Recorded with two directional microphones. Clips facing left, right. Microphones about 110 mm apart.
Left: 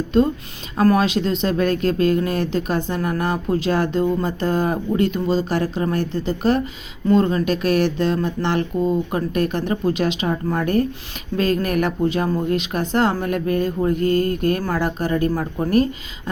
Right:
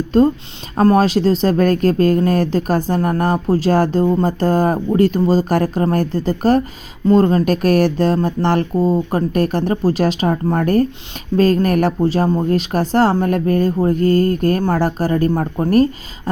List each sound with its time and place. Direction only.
0.8 s speech: 35° right (ahead or behind)